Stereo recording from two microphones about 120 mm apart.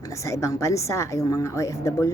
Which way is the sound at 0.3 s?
25° left (ahead or behind).